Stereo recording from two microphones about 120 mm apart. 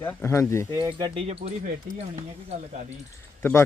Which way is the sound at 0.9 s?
45° right (ahead or behind).